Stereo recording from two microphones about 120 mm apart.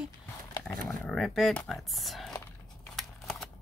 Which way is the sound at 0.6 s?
25° left (ahead or behind).